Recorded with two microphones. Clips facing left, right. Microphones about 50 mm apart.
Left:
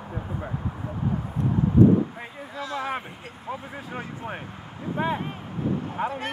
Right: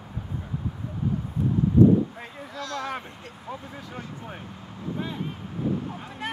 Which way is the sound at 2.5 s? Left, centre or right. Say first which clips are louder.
Left 2 dB; centre.